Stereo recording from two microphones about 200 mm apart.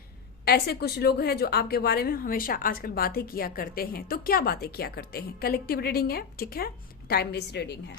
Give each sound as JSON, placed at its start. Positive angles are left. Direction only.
{"t": 0.4, "sound": "a woman's voice", "side_deg": 50}